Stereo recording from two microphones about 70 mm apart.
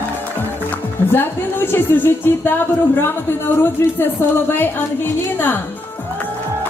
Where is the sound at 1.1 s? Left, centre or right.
Left.